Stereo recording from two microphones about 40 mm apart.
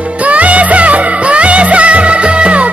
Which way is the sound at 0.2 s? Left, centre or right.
Right.